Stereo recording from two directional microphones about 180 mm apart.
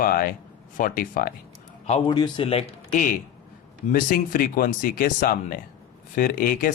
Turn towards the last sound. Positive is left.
turn(degrees=50)  # may be behind; listen again after turning